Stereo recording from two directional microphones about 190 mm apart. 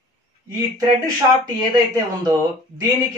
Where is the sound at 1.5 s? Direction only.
20° right (ahead or behind).